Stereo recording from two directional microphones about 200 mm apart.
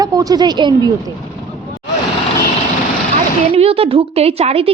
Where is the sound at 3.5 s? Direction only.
30° right (ahead or behind).